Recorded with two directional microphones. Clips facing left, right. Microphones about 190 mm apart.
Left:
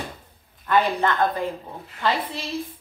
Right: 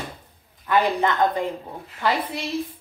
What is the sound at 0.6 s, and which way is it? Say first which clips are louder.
Speech: even; 15° right (ahead or behind).